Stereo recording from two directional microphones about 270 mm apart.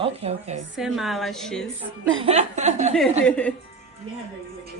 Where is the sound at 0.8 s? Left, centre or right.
Centre.